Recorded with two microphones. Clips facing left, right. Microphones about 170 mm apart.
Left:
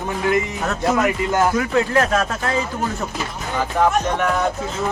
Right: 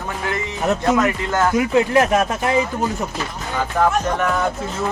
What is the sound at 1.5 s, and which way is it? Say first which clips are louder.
Speech: right 2 dB; 20° right (ahead or behind).